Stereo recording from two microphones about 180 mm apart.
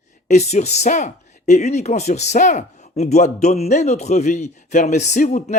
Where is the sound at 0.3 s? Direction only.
40° left (ahead or behind).